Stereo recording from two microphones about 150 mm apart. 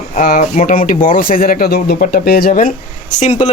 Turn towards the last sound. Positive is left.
turn(degrees=50)  # may be behind; listen again after turning